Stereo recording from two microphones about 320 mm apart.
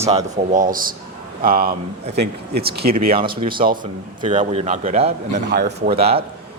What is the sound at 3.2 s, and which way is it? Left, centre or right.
A man's voice, centre.